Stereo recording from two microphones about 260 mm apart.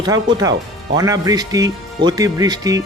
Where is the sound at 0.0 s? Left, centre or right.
Centre.